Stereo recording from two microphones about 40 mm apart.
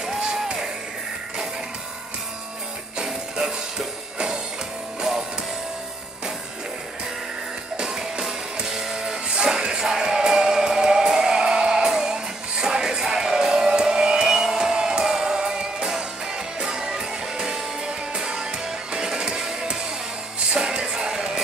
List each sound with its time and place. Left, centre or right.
0.0 s music: centre
3.0 s music: centre
7.7 s music: centre